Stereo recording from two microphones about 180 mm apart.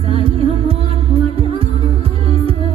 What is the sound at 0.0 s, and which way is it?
Music, 30° right (ahead or behind).